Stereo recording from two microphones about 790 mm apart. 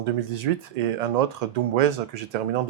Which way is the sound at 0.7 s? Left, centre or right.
Right.